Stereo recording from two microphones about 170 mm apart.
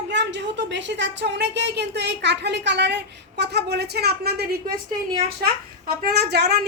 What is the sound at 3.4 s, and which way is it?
A woman's voice, 80° right.